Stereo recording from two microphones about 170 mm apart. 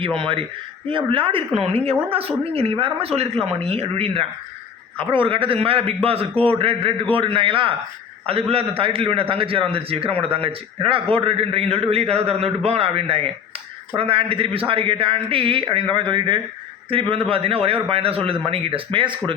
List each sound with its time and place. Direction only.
0.2 s speech: 30° right (ahead or behind)